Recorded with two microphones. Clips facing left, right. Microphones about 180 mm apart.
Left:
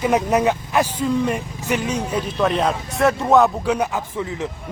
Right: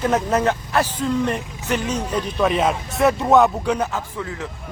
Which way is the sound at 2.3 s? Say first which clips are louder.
Right 1 dB; centre (ahead or behind).